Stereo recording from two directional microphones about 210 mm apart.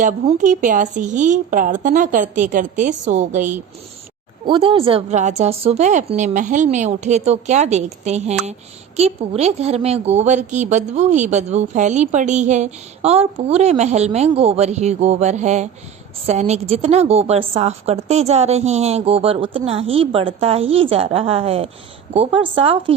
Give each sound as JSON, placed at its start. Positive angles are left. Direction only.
{"t": 0.0, "sound": "a woman's voice", "side_deg": -35}
{"t": 4.4, "sound": "a woman's voice", "side_deg": -25}